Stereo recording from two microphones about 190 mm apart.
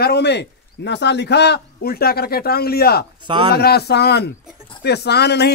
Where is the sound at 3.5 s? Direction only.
55° left (ahead or behind).